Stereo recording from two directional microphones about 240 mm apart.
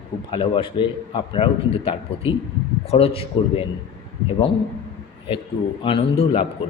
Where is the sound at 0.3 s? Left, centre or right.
Left.